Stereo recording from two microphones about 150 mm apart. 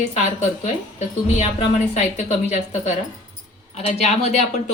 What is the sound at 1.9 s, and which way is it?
Speech, 50° left (ahead or behind).